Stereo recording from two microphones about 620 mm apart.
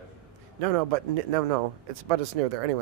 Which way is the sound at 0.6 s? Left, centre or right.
Right.